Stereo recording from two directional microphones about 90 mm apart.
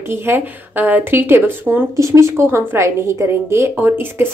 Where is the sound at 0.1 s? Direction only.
25° right (ahead or behind).